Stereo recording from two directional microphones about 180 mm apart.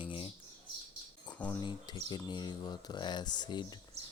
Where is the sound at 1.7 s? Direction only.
25° left (ahead or behind).